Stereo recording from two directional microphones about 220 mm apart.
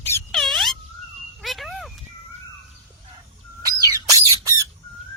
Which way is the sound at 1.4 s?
Centre (ahead or behind).